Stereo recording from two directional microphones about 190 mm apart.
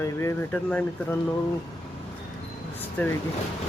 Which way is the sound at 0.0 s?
15° left (ahead or behind).